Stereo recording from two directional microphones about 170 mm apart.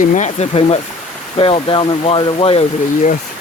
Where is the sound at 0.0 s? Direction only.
45° left (ahead or behind).